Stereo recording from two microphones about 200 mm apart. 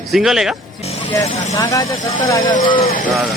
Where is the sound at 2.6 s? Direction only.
25° left (ahead or behind).